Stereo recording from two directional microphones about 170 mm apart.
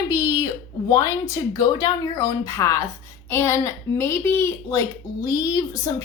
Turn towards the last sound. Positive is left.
turn(degrees=20)  # may be behind; listen again after turning